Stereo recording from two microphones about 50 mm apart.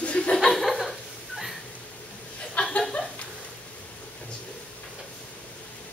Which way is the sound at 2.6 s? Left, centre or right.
Left.